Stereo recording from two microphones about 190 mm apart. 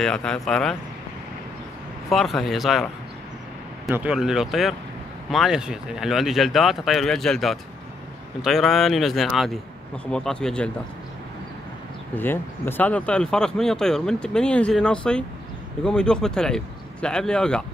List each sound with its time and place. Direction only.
0.0 s speech: 5° left (ahead or behind)
2.0 s speech: centre (ahead or behind)
3.9 s speech: 5° right (ahead or behind)
12.2 s speech: 10° left (ahead or behind)